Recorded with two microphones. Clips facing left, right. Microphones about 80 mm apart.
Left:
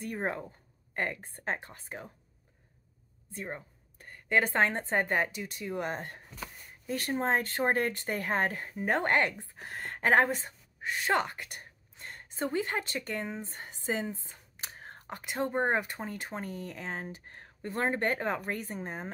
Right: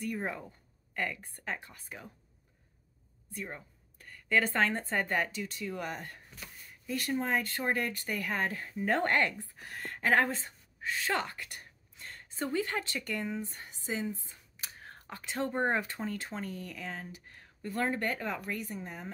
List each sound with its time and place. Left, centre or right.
0.0 s a woman's voice: left
3.3 s a woman's voice: left